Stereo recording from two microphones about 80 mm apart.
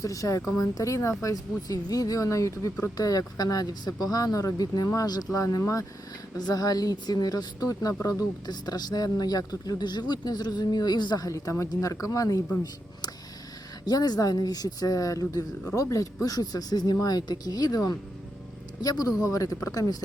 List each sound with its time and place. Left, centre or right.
0.0 s speech: left
11.3 s speech: left
13.8 s speech: left